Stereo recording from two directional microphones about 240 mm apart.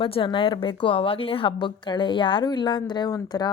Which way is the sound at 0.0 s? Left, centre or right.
Left.